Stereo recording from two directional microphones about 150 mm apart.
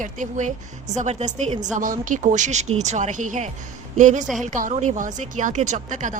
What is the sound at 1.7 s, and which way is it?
A woman's voice, 60° right (ahead or behind).